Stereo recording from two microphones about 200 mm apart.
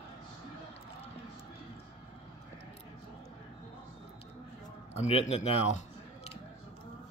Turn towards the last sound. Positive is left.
turn(degrees=35)  # may be behind; listen again after turning